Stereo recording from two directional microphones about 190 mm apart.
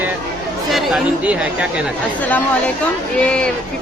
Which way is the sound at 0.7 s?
Centre (ahead or behind).